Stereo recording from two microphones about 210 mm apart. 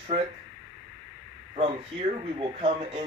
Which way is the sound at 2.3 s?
25° right (ahead or behind).